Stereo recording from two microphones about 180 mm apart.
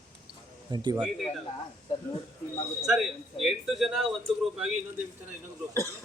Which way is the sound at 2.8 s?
Centre (ahead or behind).